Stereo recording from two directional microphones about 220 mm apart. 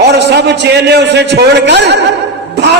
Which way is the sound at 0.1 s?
50° right (ahead or behind).